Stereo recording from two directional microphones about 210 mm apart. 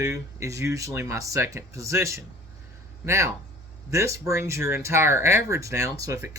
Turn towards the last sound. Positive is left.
turn(degrees=-15)  # may be behind; listen again after turning